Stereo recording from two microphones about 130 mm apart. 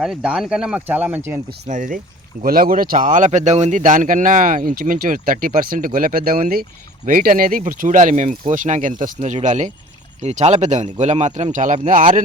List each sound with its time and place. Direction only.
0.0 s speech: 5° right (ahead or behind)
1.6 s speech: 80° right
2.4 s speech: 90° right